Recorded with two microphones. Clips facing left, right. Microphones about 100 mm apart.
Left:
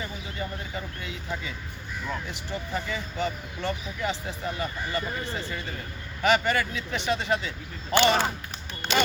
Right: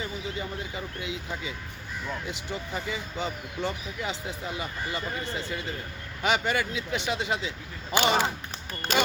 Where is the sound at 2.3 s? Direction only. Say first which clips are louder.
Left 2 dB; 15° right (ahead or behind).